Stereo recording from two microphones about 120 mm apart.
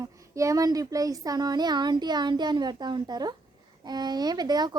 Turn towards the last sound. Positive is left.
turn(degrees=-35)  # may be behind; listen again after turning